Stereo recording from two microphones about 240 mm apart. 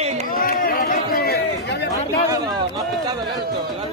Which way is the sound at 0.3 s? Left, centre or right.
Left.